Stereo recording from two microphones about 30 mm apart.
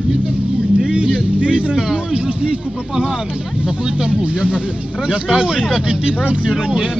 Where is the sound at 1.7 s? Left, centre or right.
Right.